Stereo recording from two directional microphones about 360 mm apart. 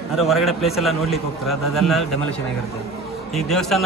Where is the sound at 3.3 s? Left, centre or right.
Centre.